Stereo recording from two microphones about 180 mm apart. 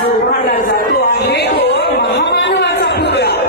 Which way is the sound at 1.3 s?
65° left (ahead or behind).